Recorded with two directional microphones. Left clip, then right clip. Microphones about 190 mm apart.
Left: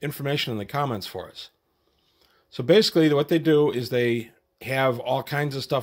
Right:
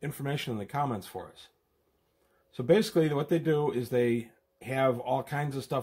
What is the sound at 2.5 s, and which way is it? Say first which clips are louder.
Speech: left 6 dB; 40° left (ahead or behind).